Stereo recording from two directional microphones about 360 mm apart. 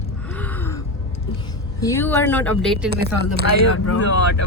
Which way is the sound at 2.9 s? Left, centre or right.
Right.